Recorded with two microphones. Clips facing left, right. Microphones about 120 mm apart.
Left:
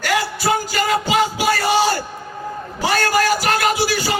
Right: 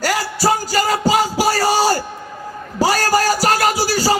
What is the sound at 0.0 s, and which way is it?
Music, 35° right (ahead or behind).